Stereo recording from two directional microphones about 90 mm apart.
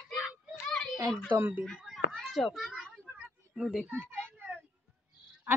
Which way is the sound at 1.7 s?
Centre (ahead or behind).